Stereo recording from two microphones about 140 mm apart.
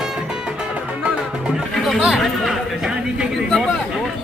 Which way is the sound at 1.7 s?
Centre (ahead or behind).